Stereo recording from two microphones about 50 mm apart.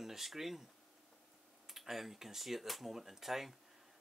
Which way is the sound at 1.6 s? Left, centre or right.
Centre.